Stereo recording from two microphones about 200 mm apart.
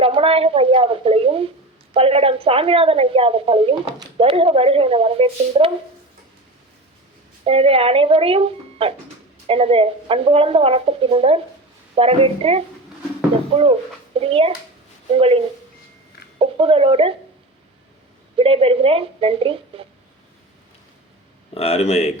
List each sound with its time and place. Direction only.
0.0 s a sound: 30° right (ahead or behind)
1.9 s a woman's voice: 30° right (ahead or behind)
7.4 s speech: 30° right (ahead or behind)
14.2 s speech: 30° right (ahead or behind)
18.3 s speech: 30° right (ahead or behind)
21.5 s speech: 30° left (ahead or behind)